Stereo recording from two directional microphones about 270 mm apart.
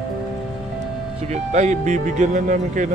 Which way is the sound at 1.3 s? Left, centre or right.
Right.